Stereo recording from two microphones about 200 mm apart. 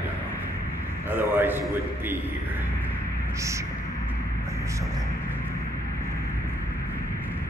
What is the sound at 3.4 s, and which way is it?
Speech, 15° right (ahead or behind).